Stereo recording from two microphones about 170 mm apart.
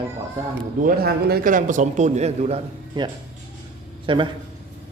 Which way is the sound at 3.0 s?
25° right (ahead or behind).